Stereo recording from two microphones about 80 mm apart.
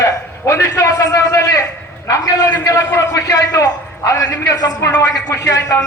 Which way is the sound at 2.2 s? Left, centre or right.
Left.